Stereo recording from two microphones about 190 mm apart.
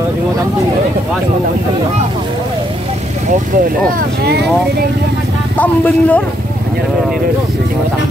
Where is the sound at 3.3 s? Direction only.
45° right (ahead or behind).